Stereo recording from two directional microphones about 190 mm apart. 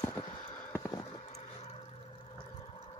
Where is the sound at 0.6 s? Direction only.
15° left (ahead or behind).